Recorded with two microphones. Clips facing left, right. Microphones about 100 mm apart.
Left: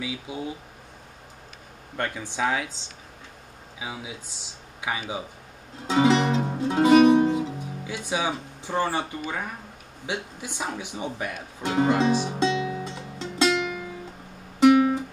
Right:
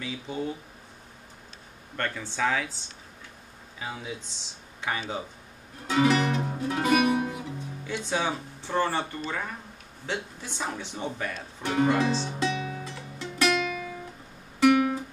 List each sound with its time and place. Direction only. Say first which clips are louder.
0.0 s speech: even; 10° left (ahead or behind)
2.0 s speech: left 2 dB; 15° left (ahead or behind)
5.9 s music: left 3 dB; 25° left (ahead or behind)
7.8 s speech: left 1 dB; 10° left (ahead or behind)
14.6 s music: left 4 dB; 25° left (ahead or behind)